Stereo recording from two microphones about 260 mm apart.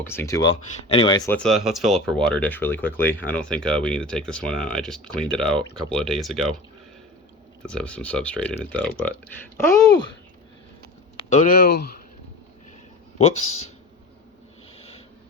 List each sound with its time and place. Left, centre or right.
0.1 s speech: centre
7.6 s speech: centre
11.2 s speech: left
13.1 s speech: left